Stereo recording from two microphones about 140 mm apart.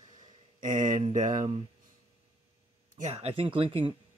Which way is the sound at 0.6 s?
65° right (ahead or behind).